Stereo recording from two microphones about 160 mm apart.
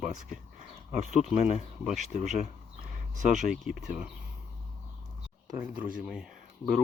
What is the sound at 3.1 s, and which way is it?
Speech, 55° right (ahead or behind).